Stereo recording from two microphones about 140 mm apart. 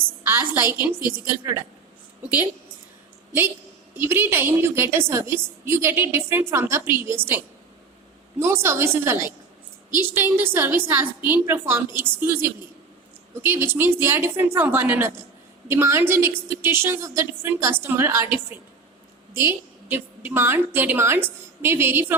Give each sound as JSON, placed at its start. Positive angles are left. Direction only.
{"t": 0.3, "sound": "a woman's voice", "side_deg": -20}
{"t": 3.9, "sound": "a woman's voice", "side_deg": -15}
{"t": 19.3, "sound": "a woman's voice", "side_deg": -15}